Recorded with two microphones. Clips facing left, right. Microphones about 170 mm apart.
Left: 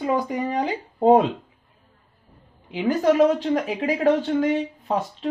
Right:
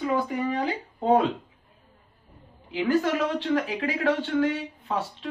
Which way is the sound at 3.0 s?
40° left (ahead or behind).